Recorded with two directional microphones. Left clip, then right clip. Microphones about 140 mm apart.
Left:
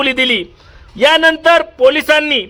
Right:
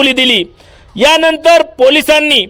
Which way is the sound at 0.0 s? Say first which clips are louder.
Right 4 dB; 25° right (ahead or behind).